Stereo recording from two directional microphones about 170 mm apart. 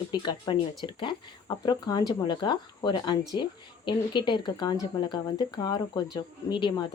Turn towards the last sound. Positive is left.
turn(degrees=30)  # may be behind; listen again after turning